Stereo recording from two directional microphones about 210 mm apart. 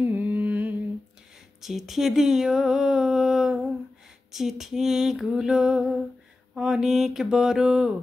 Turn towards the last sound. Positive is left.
turn(degrees=-5)  # may be behind; listen again after turning